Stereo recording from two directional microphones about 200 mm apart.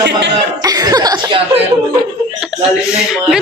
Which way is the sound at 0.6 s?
20° right (ahead or behind).